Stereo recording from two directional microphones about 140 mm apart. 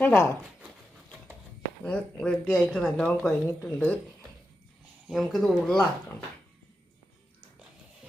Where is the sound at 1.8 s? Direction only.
10° left (ahead or behind).